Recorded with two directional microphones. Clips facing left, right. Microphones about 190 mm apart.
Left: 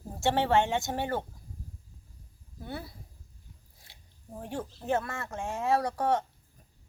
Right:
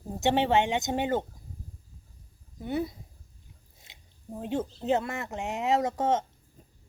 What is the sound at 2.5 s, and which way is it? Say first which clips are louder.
Speech: right 9 dB; 20° right (ahead or behind).